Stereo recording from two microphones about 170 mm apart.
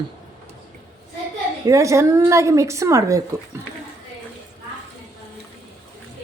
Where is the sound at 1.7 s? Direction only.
20° right (ahead or behind).